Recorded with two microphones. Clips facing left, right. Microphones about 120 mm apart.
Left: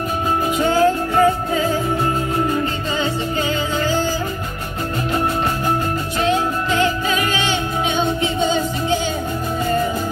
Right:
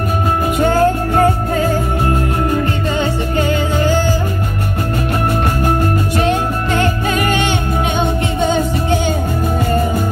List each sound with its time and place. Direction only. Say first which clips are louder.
0.6 s music: right 3 dB; 50° right (ahead or behind)
3.0 s music: right 3 dB; 55° right (ahead or behind)
6.2 s music: right 2 dB; 55° right (ahead or behind)